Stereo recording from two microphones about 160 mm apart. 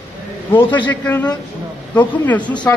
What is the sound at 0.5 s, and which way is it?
A man's voice, 15° left (ahead or behind).